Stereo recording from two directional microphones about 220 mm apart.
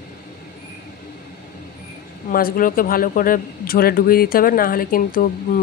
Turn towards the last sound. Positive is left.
turn(degrees=40)  # may be behind; listen again after turning